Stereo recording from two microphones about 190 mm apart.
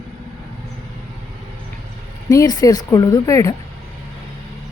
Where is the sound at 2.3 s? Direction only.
20° left (ahead or behind).